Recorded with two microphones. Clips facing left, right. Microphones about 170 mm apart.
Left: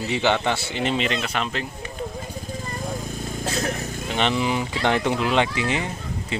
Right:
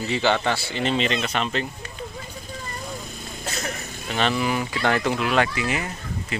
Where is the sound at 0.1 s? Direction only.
15° left (ahead or behind).